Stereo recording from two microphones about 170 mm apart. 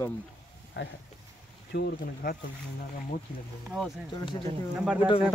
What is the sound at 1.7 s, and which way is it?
Speech, 70° left (ahead or behind).